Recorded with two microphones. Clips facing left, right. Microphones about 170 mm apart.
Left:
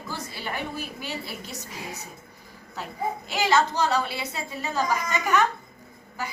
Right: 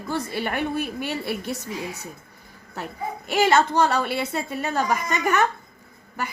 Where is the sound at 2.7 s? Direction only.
60° right (ahead or behind).